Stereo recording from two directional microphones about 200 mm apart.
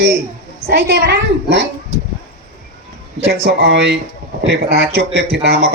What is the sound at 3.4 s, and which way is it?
Music, 55° right (ahead or behind).